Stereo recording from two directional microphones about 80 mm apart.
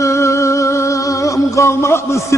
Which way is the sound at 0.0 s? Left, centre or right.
Left.